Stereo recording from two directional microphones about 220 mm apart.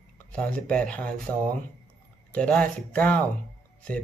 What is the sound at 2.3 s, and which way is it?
Speech, 5° left (ahead or behind).